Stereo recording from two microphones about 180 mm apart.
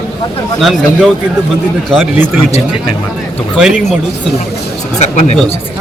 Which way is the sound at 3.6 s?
5° right (ahead or behind).